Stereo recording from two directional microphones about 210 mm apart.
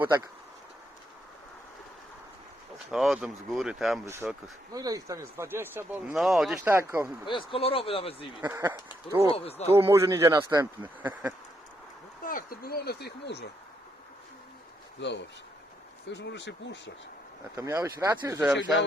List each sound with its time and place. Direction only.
2.7 s speech: centre (ahead or behind)
6.7 s speech: 10° right (ahead or behind)
7.3 s speech: 25° left (ahead or behind)
8.4 s speech: 10° right (ahead or behind)
9.3 s speech: 30° left (ahead or behind)
9.7 s speech: 15° right (ahead or behind)
12.2 s speech: 40° left (ahead or behind)
15.0 s speech: 60° left (ahead or behind)
17.6 s speech: 15° right (ahead or behind)